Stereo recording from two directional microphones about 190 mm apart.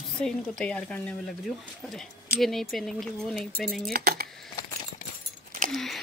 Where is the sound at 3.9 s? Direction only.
55° right (ahead or behind).